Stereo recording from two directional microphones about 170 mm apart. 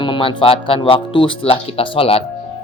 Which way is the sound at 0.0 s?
30° left (ahead or behind).